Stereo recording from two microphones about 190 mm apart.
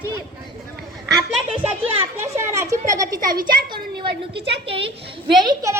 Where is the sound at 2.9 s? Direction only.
20° right (ahead or behind).